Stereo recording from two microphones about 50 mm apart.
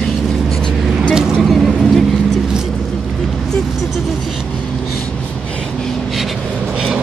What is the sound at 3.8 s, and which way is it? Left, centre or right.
Vehicle, centre.